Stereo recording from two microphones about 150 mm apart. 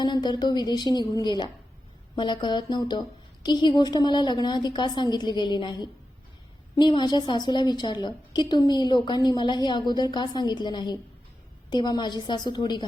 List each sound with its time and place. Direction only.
0.0 s a woman's voice: 30° left (ahead or behind)